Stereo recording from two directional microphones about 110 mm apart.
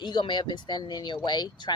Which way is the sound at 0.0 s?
45° left (ahead or behind).